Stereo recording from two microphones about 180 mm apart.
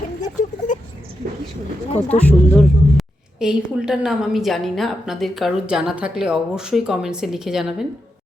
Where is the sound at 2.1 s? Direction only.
10° left (ahead or behind).